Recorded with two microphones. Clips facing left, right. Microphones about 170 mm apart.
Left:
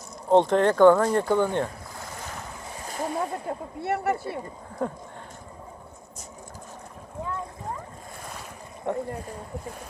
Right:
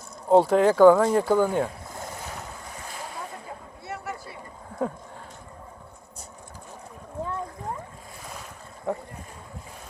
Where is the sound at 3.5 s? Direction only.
60° left (ahead or behind).